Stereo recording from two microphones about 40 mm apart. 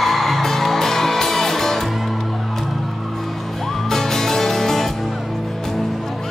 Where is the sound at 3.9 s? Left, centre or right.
Centre.